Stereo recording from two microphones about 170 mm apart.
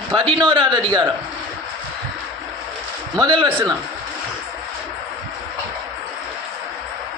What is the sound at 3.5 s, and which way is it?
Speech, 10° right (ahead or behind).